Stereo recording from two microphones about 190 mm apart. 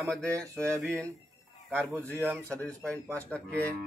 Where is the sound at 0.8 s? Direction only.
5° left (ahead or behind).